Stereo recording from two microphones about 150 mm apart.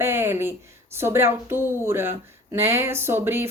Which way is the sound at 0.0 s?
15° right (ahead or behind).